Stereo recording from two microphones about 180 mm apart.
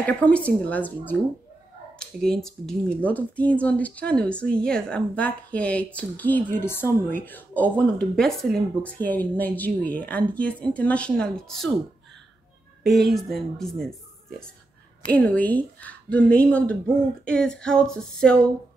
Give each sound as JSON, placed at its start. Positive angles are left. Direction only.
{"t": 0.0, "sound": "speech", "side_deg": 5}
{"t": 12.8, "sound": "speech", "side_deg": 0}
{"t": 15.0, "sound": "speech", "side_deg": 10}